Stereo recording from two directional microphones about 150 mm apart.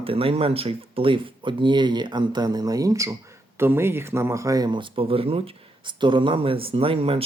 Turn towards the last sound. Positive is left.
turn(degrees=-40)  # may be behind; listen again after turning